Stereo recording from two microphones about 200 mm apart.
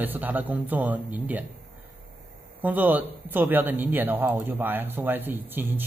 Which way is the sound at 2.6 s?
10° right (ahead or behind).